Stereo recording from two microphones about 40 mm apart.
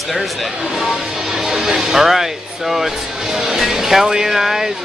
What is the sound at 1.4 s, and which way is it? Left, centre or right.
Speech, centre.